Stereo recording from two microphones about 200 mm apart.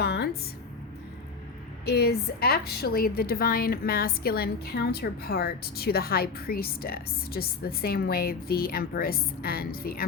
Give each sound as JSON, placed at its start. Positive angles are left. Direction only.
{"t": 0.0, "sound": "music", "side_deg": 55}
{"t": 1.8, "sound": "a woman's voice", "side_deg": 50}